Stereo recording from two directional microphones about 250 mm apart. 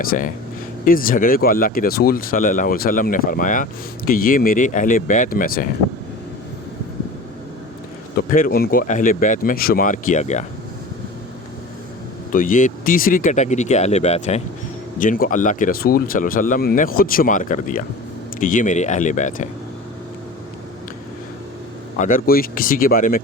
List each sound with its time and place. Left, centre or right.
0.0 s speech: left
8.1 s speech: left
12.3 s speech: left
21.9 s speech: left